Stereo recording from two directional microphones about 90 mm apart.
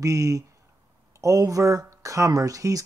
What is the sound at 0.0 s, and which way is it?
Speech, 40° right (ahead or behind).